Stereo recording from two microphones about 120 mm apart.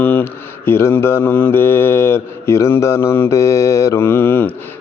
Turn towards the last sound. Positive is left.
turn(degrees=15)  # may be behind; listen again after turning